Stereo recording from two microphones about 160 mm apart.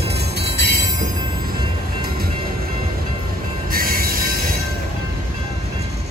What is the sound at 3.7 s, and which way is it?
Music, 65° right (ahead or behind).